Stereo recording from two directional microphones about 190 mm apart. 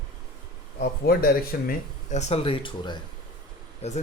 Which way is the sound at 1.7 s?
35° left (ahead or behind).